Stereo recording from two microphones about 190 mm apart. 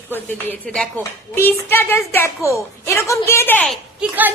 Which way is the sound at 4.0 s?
10° right (ahead or behind).